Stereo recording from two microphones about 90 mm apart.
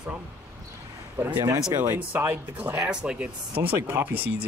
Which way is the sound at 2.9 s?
10° right (ahead or behind).